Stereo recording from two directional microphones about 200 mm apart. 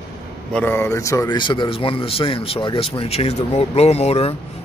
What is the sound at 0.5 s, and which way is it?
Speech, 10° left (ahead or behind).